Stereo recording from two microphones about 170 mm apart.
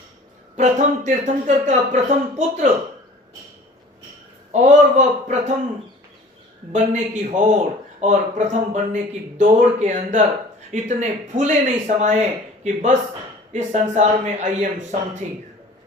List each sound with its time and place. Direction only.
0.5 s speech: 45° right (ahead or behind)
4.5 s speech: 45° right (ahead or behind)
6.7 s speech: 45° right (ahead or behind)